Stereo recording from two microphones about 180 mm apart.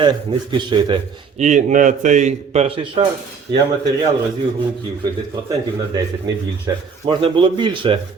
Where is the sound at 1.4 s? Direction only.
40° right (ahead or behind); by 3.6 s 25° right (ahead or behind).